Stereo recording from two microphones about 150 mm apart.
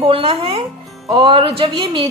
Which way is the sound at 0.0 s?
35° right (ahead or behind).